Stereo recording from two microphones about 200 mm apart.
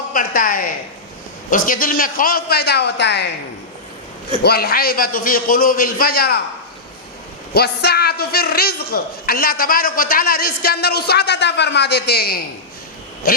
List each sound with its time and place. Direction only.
0.1 s a woman's voice: 45° left (ahead or behind)
4.4 s a man's voice: 50° left (ahead or behind)
7.5 s a man's voice: 55° left (ahead or behind)